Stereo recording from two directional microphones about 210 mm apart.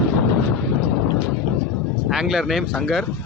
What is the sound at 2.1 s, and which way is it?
Speech, centre (ahead or behind).